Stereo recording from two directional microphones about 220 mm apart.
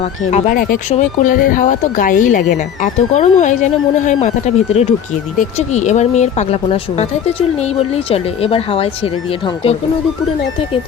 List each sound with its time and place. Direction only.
0.3 s speech: 35° left (ahead or behind)